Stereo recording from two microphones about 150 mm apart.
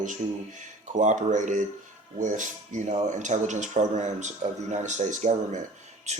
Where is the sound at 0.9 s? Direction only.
55° right (ahead or behind).